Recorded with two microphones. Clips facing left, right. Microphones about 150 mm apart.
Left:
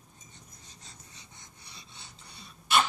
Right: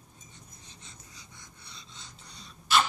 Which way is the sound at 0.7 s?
40° left (ahead or behind).